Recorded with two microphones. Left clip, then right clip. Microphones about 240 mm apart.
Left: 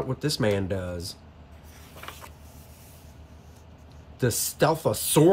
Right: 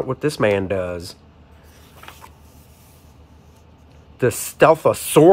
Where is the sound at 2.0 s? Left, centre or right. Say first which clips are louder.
Right 1 dB; centre.